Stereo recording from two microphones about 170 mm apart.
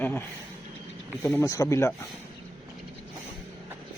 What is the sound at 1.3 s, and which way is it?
Speech, 20° left (ahead or behind).